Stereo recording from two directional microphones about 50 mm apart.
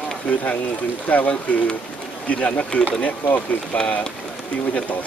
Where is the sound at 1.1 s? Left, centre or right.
Left.